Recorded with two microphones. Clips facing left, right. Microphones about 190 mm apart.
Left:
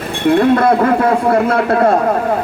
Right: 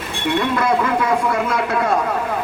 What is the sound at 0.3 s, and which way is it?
A man's voice, 55° left (ahead or behind).